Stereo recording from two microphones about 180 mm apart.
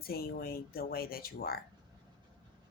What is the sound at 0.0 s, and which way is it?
Speech, 55° left (ahead or behind).